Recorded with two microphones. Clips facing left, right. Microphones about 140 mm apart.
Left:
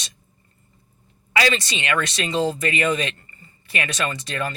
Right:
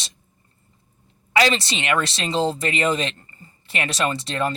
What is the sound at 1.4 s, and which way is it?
Speech, 25° right (ahead or behind).